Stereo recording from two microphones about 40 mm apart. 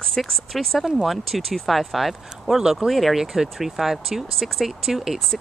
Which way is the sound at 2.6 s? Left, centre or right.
Centre.